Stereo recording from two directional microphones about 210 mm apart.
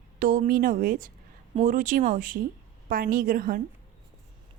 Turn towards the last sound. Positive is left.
turn(degrees=-40)  # may be behind; listen again after turning